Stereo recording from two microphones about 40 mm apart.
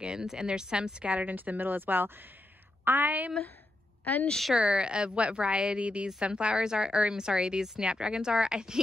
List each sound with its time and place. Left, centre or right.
0.0 s speech: centre
1.1 s a woman's voice: right
4.0 s a woman's voice: left
4.6 s speech: right